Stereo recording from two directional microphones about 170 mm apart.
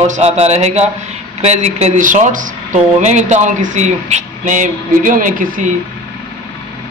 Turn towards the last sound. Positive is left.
turn(degrees=-50)  # may be behind; listen again after turning